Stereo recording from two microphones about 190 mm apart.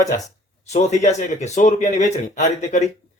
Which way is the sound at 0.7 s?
35° left (ahead or behind).